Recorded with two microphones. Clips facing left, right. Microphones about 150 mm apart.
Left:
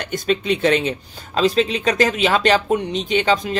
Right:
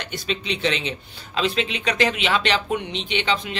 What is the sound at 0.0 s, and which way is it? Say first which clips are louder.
Speech: left 8 dB; 50° left (ahead or behind).